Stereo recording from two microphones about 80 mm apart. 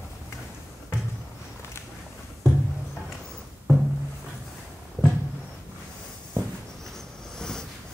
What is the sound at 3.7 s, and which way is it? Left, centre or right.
Music, left.